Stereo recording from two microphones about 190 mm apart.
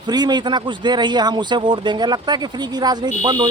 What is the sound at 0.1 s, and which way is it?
Speech, 20° right (ahead or behind).